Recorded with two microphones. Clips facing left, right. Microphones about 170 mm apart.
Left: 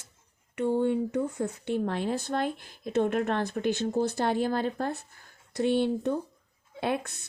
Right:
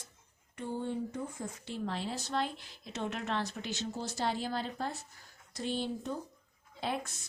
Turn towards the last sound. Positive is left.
turn(degrees=60)  # may be behind; listen again after turning